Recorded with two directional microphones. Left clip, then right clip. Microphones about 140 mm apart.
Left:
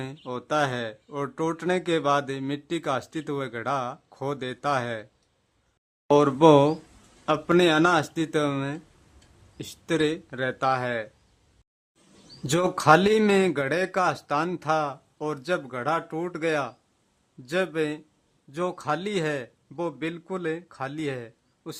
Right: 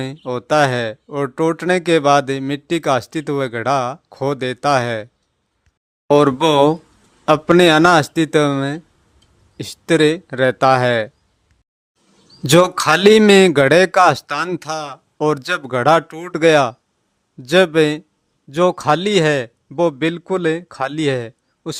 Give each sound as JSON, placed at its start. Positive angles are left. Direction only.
{"t": 0.0, "sound": "speech", "side_deg": -45}
{"t": 6.1, "sound": "speech", "side_deg": -45}
{"t": 9.6, "sound": "speech", "side_deg": -45}
{"t": 12.4, "sound": "a man's voice", "side_deg": -60}